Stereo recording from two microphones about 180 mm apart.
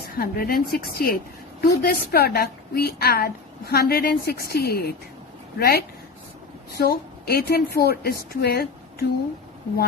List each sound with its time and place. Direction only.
0.2 s a woman's voice: 55° left (ahead or behind)